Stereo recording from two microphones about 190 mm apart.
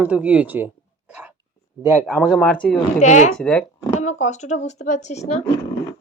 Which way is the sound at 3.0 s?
40° left (ahead or behind).